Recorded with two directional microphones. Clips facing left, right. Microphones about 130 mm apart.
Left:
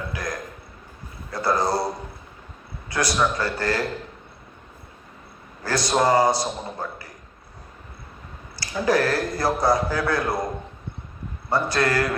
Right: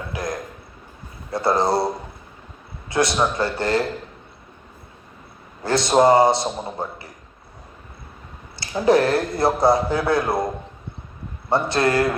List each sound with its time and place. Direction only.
0.1 s a sound: 25° right (ahead or behind)
1.3 s a man's voice: 25° right (ahead or behind)
2.9 s a man's voice: 25° right (ahead or behind)
5.6 s a man's voice: 25° right (ahead or behind)
8.5 s a man's voice: 25° right (ahead or behind)
11.4 s a man's voice: 25° right (ahead or behind)